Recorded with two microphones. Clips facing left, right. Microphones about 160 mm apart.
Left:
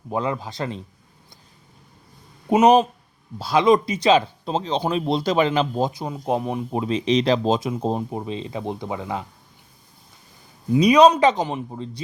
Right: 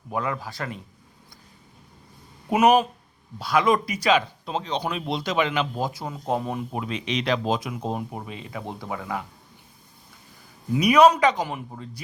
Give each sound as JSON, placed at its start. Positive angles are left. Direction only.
{"t": 0.1, "sound": "speech", "side_deg": 25}
{"t": 2.5, "sound": "speech", "side_deg": 20}
{"t": 5.8, "sound": "speech", "side_deg": 20}
{"t": 10.7, "sound": "speech", "side_deg": 20}